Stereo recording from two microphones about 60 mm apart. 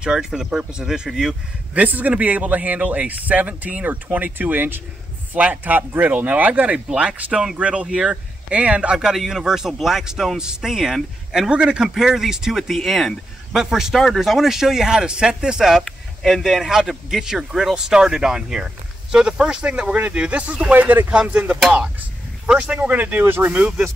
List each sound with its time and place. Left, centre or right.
0.0 s speech: centre
1.7 s speech: right; by 15.8 s centre
15.8 s a sound: centre
16.4 s speech: centre; by 23.6 s right